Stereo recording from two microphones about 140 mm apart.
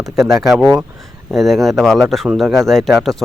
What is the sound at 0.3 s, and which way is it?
Speech, centre (ahead or behind).